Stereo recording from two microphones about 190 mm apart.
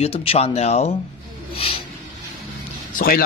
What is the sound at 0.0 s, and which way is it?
Speech, 30° left (ahead or behind).